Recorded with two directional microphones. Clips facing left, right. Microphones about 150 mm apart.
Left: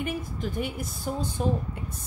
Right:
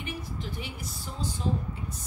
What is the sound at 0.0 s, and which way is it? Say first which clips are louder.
A woman's voice: left 6 dB; 50° left (ahead or behind).